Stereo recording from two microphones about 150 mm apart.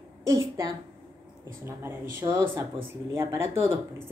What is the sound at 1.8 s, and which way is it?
A woman's voice, 15° right (ahead or behind).